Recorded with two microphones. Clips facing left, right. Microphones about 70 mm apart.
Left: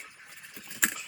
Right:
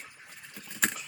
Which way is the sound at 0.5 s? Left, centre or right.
Centre.